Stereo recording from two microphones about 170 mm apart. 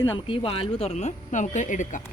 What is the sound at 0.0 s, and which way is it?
Speech, 30° left (ahead or behind).